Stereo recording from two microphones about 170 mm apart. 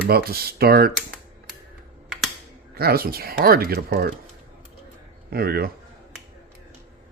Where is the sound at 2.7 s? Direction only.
65° right (ahead or behind).